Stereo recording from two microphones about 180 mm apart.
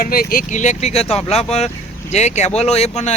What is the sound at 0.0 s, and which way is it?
Speech, 55° left (ahead or behind).